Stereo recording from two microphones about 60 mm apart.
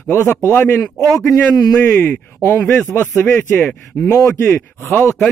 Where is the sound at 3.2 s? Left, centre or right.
Left.